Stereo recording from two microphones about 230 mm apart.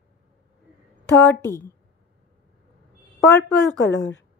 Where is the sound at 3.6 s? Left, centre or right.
Left.